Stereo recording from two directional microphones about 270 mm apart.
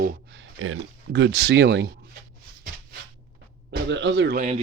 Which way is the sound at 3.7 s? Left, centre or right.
Right.